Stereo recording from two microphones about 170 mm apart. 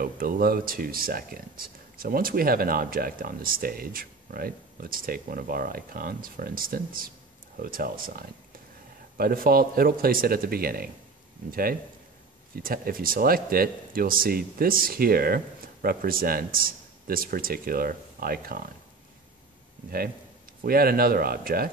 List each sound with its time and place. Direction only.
0.0 s speech: 60° right (ahead or behind)
12.5 s speech: 60° right (ahead or behind)
20.6 s speech: 60° right (ahead or behind)